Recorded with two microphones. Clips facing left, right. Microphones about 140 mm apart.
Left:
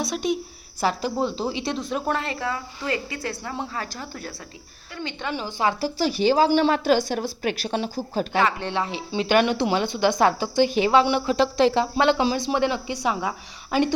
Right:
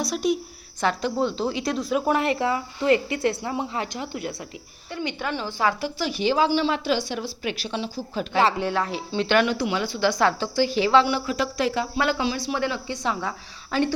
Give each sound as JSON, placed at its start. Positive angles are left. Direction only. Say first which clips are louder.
{"t": 0.0, "sound": "a woman's voice", "louder": "right 1 dB", "side_deg": 0}
{"t": 2.1, "sound": "a woman's voice", "louder": "right 5 dB", "side_deg": -20}
{"t": 5.3, "sound": "a woman's voice", "louder": "left 1 dB", "side_deg": 15}
{"t": 5.8, "sound": "a woman's voice", "louder": "left 3 dB", "side_deg": 35}
{"t": 6.5, "sound": "a woman's voice", "louder": "left 4 dB", "side_deg": 50}
{"t": 8.8, "sound": "a woman's voice", "louder": "even", "side_deg": 10}
{"t": 9.4, "sound": "a woman's voice", "louder": "left 2 dB", "side_deg": 25}